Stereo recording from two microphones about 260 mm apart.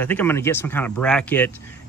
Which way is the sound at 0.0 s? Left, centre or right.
Centre.